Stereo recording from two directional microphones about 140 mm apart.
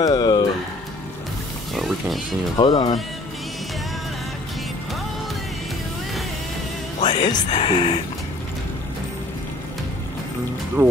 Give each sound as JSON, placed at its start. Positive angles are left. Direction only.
{"t": 0.0, "sound": "a sound", "side_deg": 30}
{"t": 1.7, "sound": "music", "side_deg": 0}
{"t": 2.5, "sound": "speech", "side_deg": 30}
{"t": 7.1, "sound": "speech", "side_deg": 40}
{"t": 10.8, "sound": "speech", "side_deg": -20}